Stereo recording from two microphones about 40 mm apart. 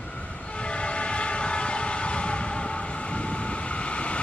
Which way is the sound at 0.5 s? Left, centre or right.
Left.